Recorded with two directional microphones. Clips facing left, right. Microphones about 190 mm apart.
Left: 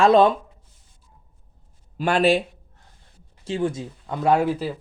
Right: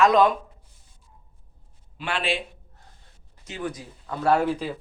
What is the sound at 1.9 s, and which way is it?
Speech, 40° left (ahead or behind).